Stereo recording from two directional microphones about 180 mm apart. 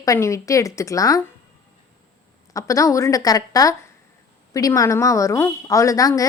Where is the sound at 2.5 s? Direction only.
20° left (ahead or behind).